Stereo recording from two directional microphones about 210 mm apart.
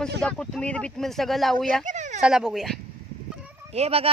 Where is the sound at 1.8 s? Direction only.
35° right (ahead or behind).